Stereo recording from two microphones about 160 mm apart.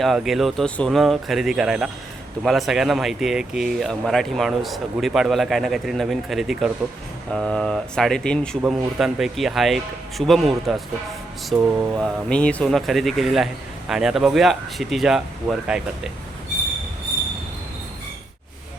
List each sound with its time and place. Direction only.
0.0 s speech: centre (ahead or behind)
11.5 s mantra: 15° right (ahead or behind)
11.9 s speech: 5° left (ahead or behind)